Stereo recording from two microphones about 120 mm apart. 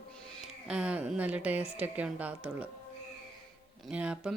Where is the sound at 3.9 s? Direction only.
10° right (ahead or behind).